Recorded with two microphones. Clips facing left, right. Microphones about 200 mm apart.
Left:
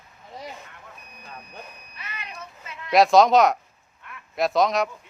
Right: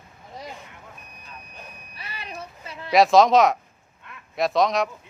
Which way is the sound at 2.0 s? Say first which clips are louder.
Right 1 dB; 35° right (ahead or behind).